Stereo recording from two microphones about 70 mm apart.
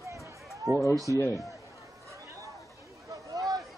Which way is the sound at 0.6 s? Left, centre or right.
Right.